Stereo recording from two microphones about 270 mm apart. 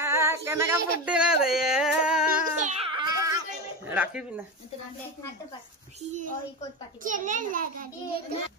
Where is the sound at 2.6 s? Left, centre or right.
Right.